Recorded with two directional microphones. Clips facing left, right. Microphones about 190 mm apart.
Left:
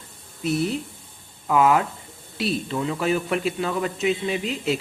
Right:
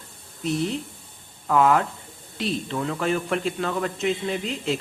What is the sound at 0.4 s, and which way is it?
A man's voice, 5° left (ahead or behind).